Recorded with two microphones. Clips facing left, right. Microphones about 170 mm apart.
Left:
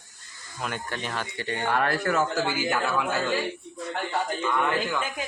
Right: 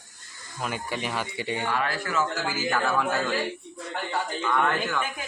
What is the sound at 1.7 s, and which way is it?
Speech, 50° left (ahead or behind).